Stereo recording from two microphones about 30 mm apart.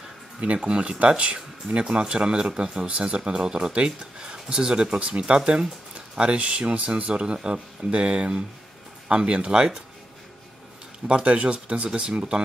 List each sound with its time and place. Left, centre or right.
0.4 s speech: right
7.1 s speech: right
9.1 s speech: right
11.1 s speech: right